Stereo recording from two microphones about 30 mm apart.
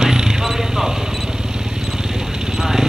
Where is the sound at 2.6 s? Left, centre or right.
Centre.